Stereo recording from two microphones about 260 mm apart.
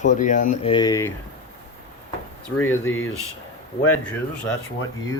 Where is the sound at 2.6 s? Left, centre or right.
Centre.